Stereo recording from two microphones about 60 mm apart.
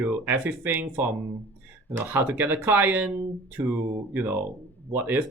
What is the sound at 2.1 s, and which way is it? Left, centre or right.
Speech, right.